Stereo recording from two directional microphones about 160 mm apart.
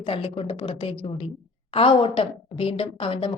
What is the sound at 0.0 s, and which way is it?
Speech, 35° left (ahead or behind).